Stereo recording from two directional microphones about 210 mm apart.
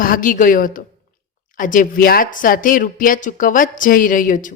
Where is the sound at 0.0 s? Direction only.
40° left (ahead or behind).